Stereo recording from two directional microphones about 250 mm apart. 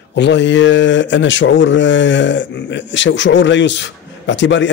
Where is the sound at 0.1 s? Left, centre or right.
Left.